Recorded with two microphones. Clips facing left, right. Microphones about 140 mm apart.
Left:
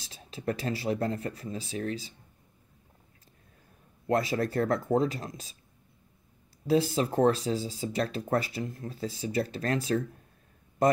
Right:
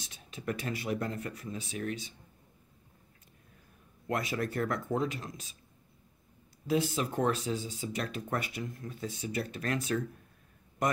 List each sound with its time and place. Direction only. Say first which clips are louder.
0.0 s speech: left 5 dB; 35° left (ahead or behind)
4.1 s speech: left 6 dB; 35° left (ahead or behind)
6.7 s speech: left 5 dB; 35° left (ahead or behind)